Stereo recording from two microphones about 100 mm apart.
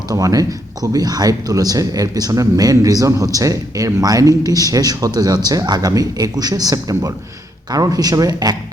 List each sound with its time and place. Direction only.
0.1 s speech: 35° right (ahead or behind)